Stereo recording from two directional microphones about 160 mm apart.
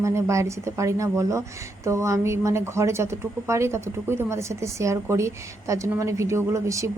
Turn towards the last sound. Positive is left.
turn(degrees=-20)  # may be behind; listen again after turning